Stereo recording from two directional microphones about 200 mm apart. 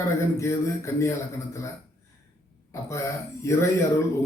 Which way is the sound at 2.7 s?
15° left (ahead or behind).